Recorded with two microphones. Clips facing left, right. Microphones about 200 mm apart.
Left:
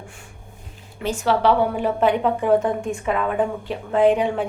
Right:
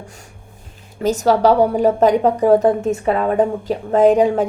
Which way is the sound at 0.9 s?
40° right (ahead or behind).